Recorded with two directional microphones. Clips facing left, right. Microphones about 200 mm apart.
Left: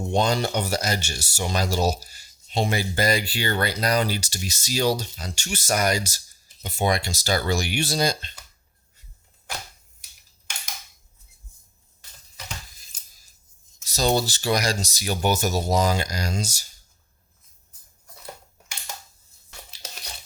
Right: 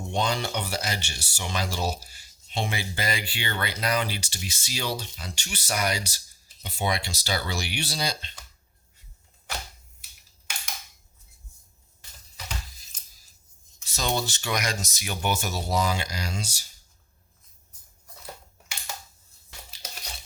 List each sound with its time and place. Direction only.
0.1 s speech: 45° left (ahead or behind)
13.8 s speech: 40° left (ahead or behind)